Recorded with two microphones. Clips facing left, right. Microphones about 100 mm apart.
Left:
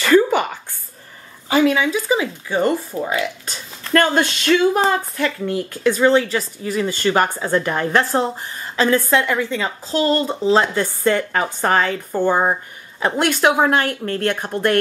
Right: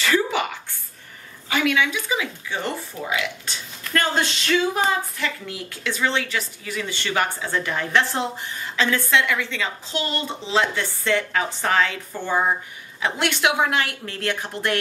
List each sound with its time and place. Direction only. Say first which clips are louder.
0.0 s a sound: left 7 dB; 45° left (ahead or behind)
1.5 s a woman's voice: left 6 dB; 35° left (ahead or behind)
3.9 s a woman's voice: left 6 dB; 50° left (ahead or behind)